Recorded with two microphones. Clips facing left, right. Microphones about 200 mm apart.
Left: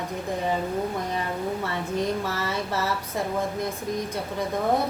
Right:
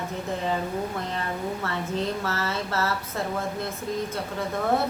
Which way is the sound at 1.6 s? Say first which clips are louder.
Left 1 dB; 15° left (ahead or behind).